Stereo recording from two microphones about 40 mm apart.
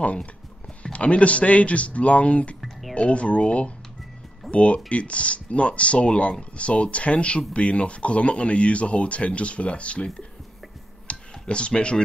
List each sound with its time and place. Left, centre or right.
0.0 s speech: left
11.1 s clicking: left